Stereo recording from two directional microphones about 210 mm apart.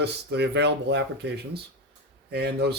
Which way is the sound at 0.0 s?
50° right (ahead or behind).